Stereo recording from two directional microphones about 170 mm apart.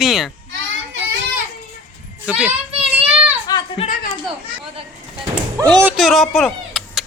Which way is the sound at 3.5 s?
25° left (ahead or behind).